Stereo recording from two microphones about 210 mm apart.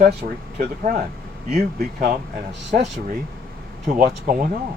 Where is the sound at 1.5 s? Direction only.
35° right (ahead or behind).